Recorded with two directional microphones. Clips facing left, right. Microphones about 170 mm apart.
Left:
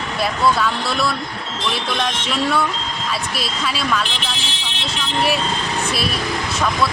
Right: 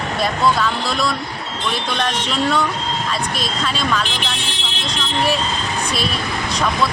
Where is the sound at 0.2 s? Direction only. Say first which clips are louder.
Even; 5° left (ahead or behind).